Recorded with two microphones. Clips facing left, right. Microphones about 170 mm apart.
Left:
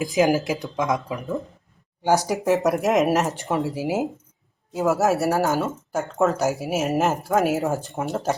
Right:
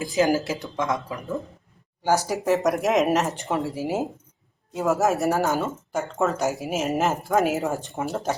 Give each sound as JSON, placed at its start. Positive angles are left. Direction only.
{"t": 0.0, "sound": "speech", "side_deg": 15}